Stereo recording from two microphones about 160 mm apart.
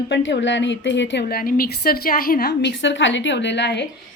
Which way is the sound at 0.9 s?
90° left.